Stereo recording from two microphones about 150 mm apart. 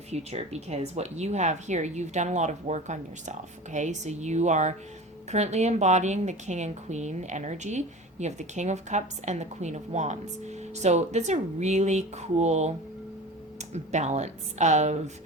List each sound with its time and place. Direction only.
0.1 s a woman's voice: 45° right (ahead or behind)